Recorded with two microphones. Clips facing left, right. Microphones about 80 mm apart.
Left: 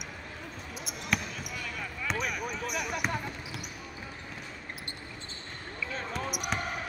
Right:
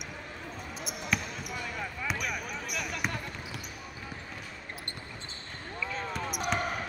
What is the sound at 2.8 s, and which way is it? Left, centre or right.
Basketball bounce, centre.